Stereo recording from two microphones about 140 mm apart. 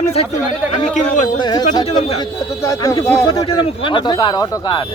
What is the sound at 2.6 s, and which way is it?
Speech, 25° left (ahead or behind).